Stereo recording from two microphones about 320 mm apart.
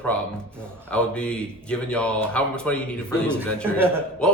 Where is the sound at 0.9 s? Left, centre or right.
Centre.